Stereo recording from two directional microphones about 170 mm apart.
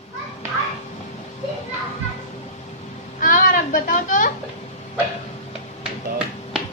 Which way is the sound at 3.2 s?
55° left (ahead or behind).